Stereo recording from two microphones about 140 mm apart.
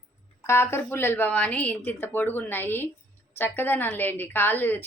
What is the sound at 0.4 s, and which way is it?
A woman's voice, 20° left (ahead or behind).